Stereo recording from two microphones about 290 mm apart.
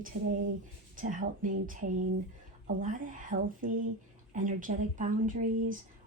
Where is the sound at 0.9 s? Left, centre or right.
Right.